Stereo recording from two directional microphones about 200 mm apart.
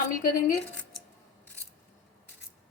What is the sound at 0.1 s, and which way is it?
Speech, 45° left (ahead or behind).